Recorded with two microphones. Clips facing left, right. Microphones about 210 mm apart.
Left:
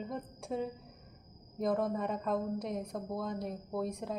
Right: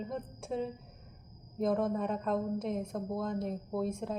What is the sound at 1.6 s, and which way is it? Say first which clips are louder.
A woman's voice: right 2 dB; centre (ahead or behind).